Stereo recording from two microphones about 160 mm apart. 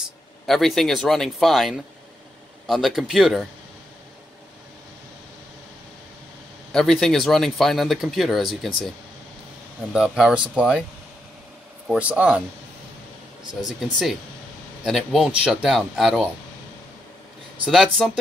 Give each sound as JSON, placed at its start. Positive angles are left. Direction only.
{"t": 0.0, "sound": "speech", "side_deg": 0}
{"t": 6.7, "sound": "speech", "side_deg": 5}
{"t": 9.9, "sound": "speech", "side_deg": -5}
{"t": 11.9, "sound": "speech", "side_deg": -10}
{"t": 13.5, "sound": "speech", "side_deg": 50}
{"t": 14.8, "sound": "speech", "side_deg": -5}
{"t": 17.9, "sound": "speech", "side_deg": 0}